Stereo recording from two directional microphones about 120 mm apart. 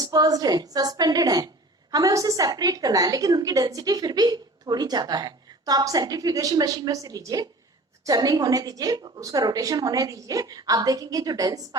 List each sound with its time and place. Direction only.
0.0 s a woman's voice: 30° right (ahead or behind)